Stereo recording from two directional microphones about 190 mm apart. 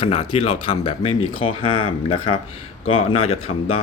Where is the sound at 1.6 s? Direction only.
90° left.